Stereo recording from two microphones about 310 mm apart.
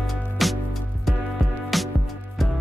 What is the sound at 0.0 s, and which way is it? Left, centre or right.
Music, centre.